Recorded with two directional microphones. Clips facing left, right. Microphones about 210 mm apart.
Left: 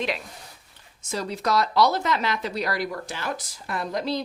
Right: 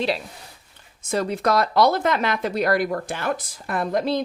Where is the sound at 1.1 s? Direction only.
55° right (ahead or behind).